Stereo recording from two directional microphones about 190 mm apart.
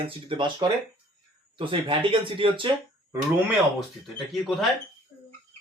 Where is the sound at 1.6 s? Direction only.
25° right (ahead or behind).